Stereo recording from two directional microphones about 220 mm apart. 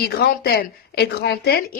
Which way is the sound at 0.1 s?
45° left (ahead or behind).